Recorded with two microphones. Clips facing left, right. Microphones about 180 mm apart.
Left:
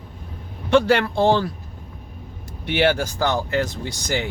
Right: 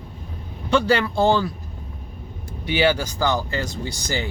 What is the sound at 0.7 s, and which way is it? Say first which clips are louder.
Speech: left 2 dB; 60° left (ahead or behind).